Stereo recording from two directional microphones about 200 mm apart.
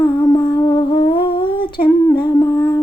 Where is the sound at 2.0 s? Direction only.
15° left (ahead or behind).